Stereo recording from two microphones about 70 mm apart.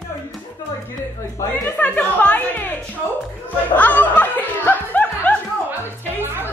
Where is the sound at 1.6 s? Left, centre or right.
Left.